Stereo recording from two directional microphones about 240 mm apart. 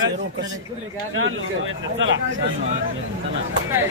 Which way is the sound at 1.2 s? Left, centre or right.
Right.